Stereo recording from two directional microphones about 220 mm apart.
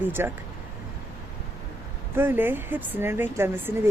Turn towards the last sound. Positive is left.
turn(degrees=-10)  # may be behind; listen again after turning